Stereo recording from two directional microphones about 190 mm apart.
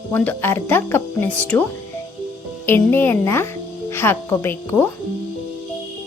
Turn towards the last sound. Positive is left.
turn(degrees=10)  # may be behind; listen again after turning